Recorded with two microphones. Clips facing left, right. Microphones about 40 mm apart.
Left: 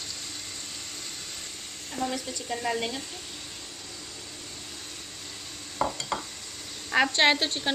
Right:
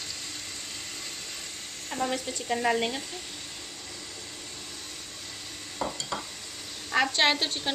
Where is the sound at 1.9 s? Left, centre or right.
Centre.